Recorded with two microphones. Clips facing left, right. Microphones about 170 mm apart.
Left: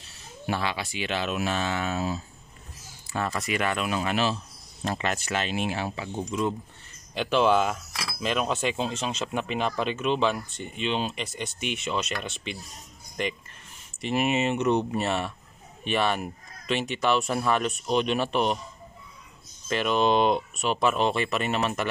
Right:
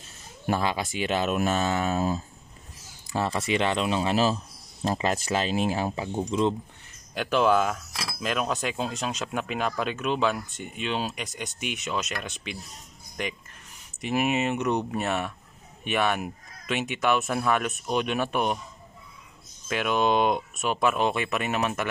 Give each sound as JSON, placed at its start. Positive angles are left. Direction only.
{"t": 0.5, "sound": "speech", "side_deg": -45}
{"t": 3.2, "sound": "speech", "side_deg": -25}
{"t": 7.2, "sound": "speech", "side_deg": -5}
{"t": 14.0, "sound": "speech", "side_deg": -5}
{"t": 19.7, "sound": "speech", "side_deg": -10}